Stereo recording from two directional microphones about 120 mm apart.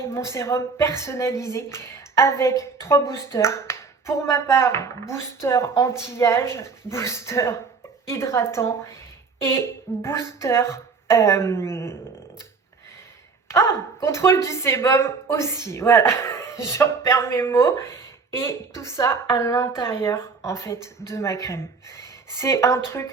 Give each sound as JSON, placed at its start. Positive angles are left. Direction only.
{"t": 0.1, "sound": "a woman's voice", "side_deg": 25}
{"t": 13.5, "sound": "a woman's voice", "side_deg": 25}